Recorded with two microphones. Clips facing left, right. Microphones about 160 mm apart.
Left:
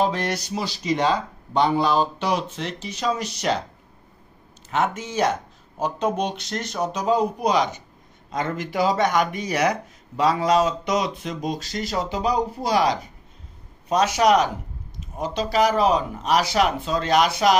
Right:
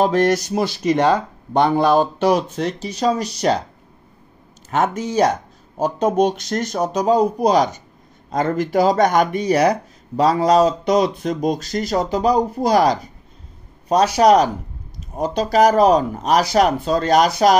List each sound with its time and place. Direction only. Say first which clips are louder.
0.0 s speech: right 7 dB; 45° right (ahead or behind)
4.6 s speech: right 4 dB; 45° right (ahead or behind)